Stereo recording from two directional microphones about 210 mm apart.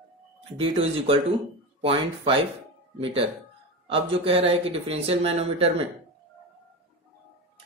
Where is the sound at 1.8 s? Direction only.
25° right (ahead or behind).